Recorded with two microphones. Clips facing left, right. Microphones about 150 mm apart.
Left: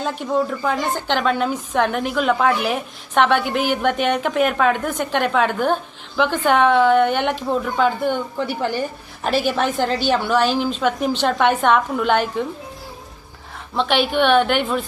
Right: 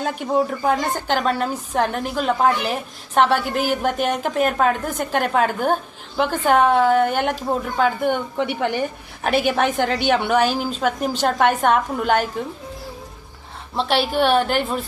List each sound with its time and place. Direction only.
0.0 s a woman's voice: 50° right (ahead or behind)
13.7 s a woman's voice: 35° right (ahead or behind)